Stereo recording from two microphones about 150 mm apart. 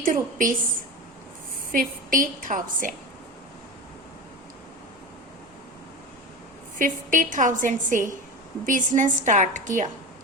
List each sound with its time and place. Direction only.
0.0 s a woman's voice: 65° right (ahead or behind)
1.7 s a woman's voice: 65° right (ahead or behind)
6.7 s a woman's voice: 60° right (ahead or behind)